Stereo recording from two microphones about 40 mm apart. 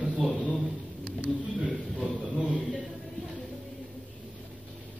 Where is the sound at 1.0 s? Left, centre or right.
Right.